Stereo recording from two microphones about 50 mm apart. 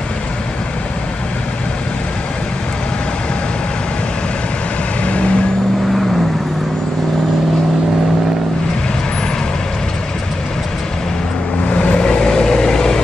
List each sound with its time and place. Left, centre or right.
5.0 s vehicle: left
11.7 s vehicle: left